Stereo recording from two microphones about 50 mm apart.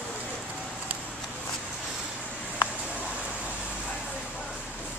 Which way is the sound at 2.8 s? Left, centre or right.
Right.